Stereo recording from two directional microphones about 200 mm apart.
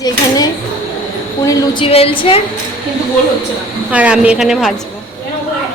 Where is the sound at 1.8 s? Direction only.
30° left (ahead or behind).